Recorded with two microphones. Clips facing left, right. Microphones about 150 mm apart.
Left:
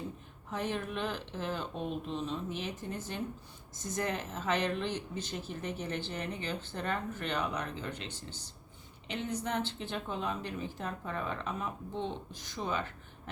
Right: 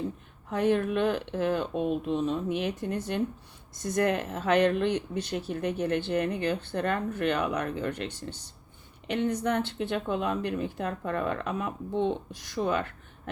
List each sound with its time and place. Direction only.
0.5 s speech: 60° right (ahead or behind)